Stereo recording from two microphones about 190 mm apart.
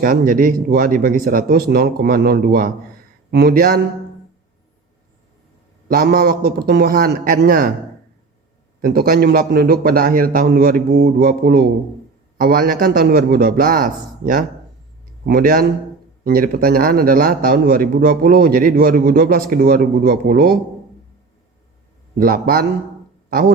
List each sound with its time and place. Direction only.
0.0 s a man's voice: 45° right (ahead or behind)
5.9 s a man's voice: 55° right (ahead or behind)
8.8 s a man's voice: 50° right (ahead or behind)
22.2 s a man's voice: 50° right (ahead or behind)